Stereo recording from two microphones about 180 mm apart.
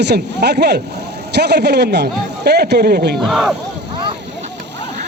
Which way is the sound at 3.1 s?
Centre (ahead or behind).